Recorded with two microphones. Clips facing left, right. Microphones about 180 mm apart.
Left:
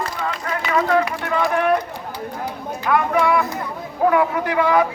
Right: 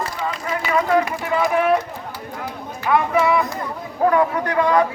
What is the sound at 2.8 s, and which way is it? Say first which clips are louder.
A man's voice: right 1 dB; 5° right (ahead or behind).